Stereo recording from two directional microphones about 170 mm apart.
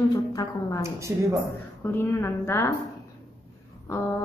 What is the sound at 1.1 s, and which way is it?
Speech, 15° right (ahead or behind).